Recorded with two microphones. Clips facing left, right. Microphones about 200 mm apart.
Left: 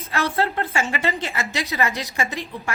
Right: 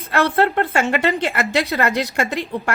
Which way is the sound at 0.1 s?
60° right (ahead or behind).